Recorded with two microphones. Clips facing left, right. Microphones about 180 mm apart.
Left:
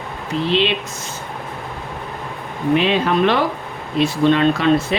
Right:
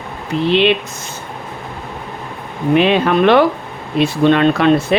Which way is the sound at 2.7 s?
60° right (ahead or behind).